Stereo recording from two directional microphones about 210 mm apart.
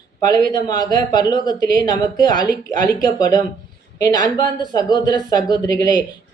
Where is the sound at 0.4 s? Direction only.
20° left (ahead or behind).